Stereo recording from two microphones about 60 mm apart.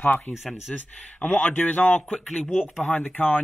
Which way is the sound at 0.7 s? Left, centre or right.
Left.